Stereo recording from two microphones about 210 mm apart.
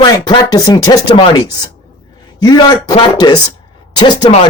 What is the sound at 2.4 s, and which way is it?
Speech, 20° left (ahead or behind).